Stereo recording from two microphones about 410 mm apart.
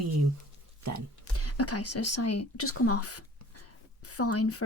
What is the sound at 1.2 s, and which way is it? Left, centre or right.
A woman's voice, left.